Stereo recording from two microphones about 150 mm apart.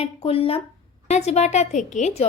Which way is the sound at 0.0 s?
40° left (ahead or behind).